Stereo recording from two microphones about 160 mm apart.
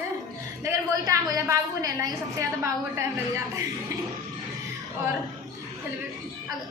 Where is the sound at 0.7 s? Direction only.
20° right (ahead or behind).